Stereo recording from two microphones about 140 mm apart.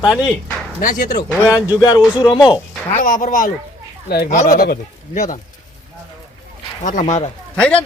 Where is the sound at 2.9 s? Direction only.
70° left (ahead or behind).